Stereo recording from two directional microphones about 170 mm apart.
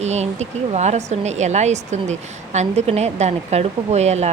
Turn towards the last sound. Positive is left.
turn(degrees=-40)  # may be behind; listen again after turning